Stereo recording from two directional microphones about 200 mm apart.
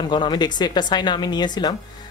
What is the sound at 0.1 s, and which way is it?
A woman's voice, 20° left (ahead or behind).